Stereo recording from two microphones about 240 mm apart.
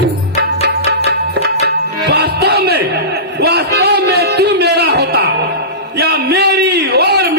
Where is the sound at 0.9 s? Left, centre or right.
Right.